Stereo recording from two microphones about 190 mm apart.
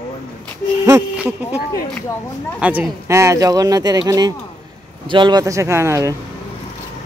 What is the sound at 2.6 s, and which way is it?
Speech, 10° right (ahead or behind).